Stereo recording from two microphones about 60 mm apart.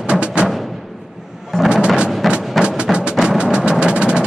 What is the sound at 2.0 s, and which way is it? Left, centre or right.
Music, centre.